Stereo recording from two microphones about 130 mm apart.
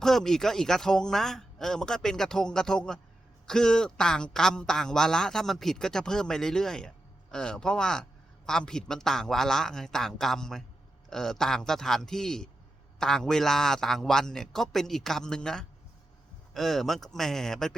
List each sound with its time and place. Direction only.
0.0 s a man's voice: 5° left (ahead or behind)